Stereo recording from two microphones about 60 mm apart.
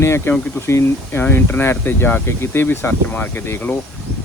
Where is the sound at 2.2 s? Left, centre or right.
Left.